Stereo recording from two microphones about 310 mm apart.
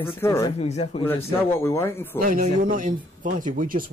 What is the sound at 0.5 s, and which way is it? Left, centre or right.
Speech, left.